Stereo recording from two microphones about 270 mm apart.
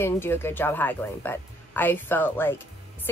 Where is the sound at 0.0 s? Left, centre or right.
Centre.